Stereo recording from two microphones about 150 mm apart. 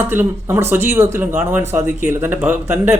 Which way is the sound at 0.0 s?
15° right (ahead or behind).